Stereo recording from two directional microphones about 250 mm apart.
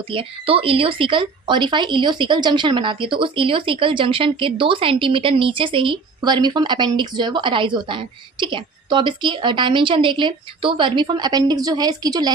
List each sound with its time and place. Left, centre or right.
0.1 s speech: right